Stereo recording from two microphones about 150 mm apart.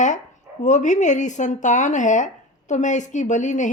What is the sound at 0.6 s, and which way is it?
A woman's voice, 55° left (ahead or behind).